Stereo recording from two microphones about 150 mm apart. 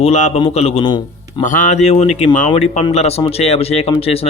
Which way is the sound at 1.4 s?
60° left (ahead or behind).